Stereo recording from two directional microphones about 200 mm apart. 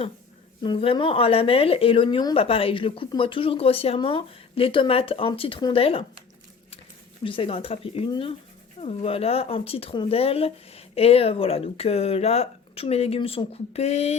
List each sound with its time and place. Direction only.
0.6 s speech: 25° left (ahead or behind)
7.3 s speech: 25° left (ahead or behind)